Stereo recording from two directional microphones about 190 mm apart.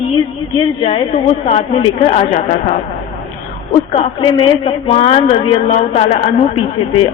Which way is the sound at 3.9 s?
25° left (ahead or behind).